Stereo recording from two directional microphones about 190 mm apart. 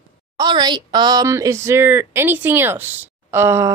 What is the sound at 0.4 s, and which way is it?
Speech, 20° right (ahead or behind).